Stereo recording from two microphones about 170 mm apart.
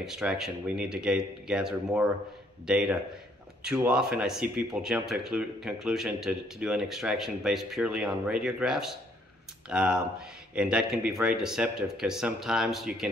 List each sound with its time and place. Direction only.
0.0 s speech: 5° right (ahead or behind)